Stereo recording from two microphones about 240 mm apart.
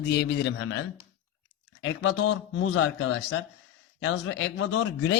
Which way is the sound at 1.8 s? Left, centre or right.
Left.